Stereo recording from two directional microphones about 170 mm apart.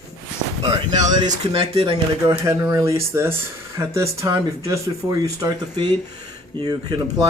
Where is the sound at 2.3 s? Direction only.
20° right (ahead or behind).